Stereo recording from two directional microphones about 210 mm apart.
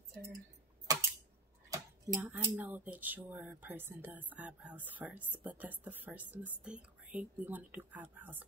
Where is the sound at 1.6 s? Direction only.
15° right (ahead or behind).